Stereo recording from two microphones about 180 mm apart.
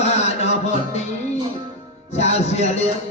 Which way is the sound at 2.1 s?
40° left (ahead or behind).